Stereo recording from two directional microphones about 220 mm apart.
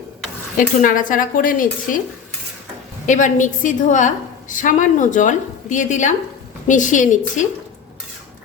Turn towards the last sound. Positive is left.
turn(degrees=35)  # may be behind; listen again after turning